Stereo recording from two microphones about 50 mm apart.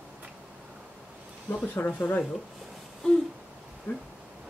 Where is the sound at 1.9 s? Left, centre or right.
Left.